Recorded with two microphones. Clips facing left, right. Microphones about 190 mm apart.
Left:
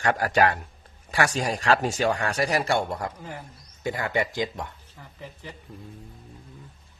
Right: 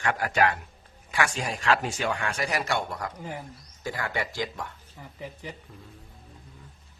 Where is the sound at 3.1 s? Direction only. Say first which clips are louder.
Right 2 dB; 15° right (ahead or behind).